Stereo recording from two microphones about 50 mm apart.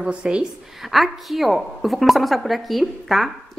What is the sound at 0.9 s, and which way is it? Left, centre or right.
A woman's voice, centre.